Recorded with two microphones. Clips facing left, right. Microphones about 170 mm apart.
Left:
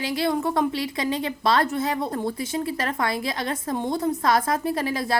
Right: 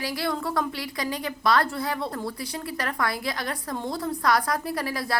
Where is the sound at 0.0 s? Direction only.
25° left (ahead or behind).